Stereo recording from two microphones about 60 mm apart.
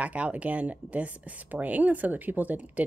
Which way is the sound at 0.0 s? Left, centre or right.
Right.